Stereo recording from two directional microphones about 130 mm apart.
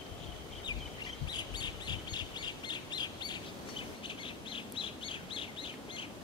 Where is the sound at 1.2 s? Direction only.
35° left (ahead or behind).